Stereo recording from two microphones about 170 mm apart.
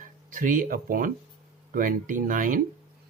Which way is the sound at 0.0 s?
50° right (ahead or behind).